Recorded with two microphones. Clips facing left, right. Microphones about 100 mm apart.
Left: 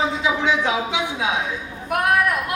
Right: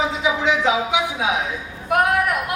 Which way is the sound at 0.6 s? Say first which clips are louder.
Right 3 dB; 20° right (ahead or behind).